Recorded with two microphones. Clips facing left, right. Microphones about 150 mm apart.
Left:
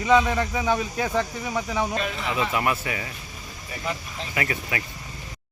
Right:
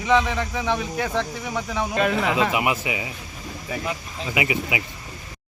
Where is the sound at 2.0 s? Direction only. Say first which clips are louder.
Right 6 dB; 75° right (ahead or behind); by 2.5 s 90° right.